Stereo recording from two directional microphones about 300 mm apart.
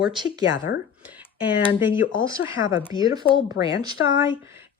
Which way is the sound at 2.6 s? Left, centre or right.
Left.